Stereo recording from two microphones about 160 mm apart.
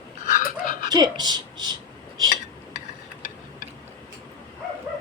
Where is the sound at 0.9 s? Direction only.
25° right (ahead or behind).